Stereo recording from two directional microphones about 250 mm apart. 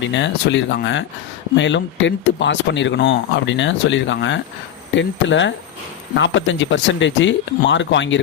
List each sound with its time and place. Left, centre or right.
0.0 s speech: left